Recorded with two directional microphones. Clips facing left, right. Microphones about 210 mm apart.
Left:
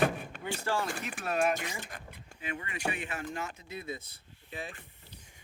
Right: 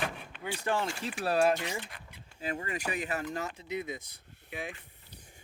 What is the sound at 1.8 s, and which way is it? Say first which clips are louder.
Speech: left 1 dB; 45° left (ahead or behind).